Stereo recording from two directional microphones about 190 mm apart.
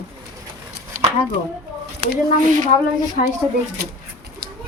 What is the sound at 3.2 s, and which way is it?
Speech, 40° left (ahead or behind).